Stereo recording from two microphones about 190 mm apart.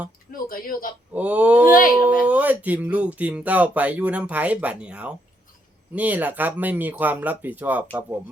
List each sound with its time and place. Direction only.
0.3 s speech: 50° left (ahead or behind)
1.1 s speech: 5° right (ahead or behind)